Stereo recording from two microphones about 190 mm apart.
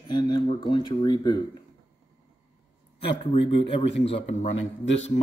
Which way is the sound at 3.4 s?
30° left (ahead or behind).